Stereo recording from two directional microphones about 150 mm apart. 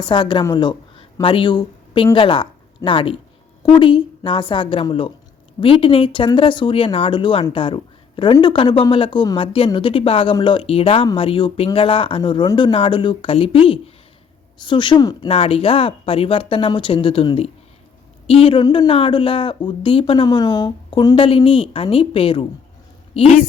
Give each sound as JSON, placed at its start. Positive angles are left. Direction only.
{"t": 0.1, "sound": "speech", "side_deg": 30}
{"t": 15.3, "sound": "speech", "side_deg": 40}
{"t": 23.1, "sound": "a woman's voice", "side_deg": 50}